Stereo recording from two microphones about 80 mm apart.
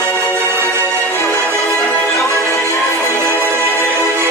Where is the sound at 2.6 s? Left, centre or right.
Right.